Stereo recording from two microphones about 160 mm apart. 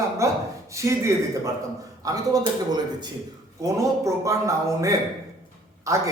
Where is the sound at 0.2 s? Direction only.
20° right (ahead or behind).